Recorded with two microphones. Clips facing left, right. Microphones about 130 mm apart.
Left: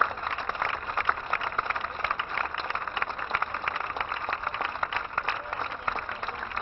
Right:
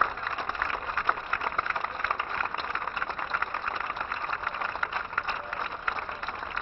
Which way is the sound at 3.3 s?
75° left (ahead or behind).